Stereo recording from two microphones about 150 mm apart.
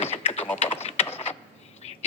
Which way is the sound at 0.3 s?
10° left (ahead or behind).